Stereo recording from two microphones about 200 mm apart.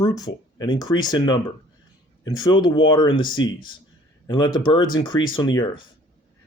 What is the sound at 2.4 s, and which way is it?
Speech, 20° left (ahead or behind).